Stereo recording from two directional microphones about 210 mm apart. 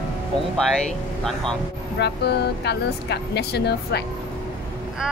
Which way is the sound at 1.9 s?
55° left (ahead or behind).